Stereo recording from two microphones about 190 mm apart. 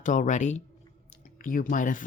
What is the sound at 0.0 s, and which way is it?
Speech, 40° left (ahead or behind).